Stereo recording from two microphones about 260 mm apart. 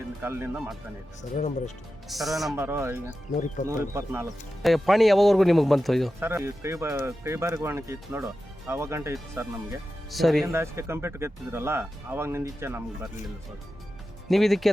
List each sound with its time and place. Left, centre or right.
0.2 s speech: centre
1.4 s speech: left
2.0 s speech: centre
3.1 s speech: left
3.9 s speech: centre
10.4 s speech: centre
14.3 s speech: centre